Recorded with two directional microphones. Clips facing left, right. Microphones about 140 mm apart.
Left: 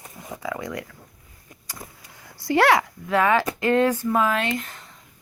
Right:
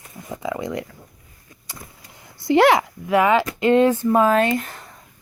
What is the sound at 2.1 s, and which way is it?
Speech, 20° right (ahead or behind).